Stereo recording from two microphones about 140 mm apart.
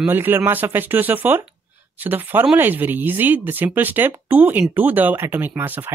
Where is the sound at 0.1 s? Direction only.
15° right (ahead or behind).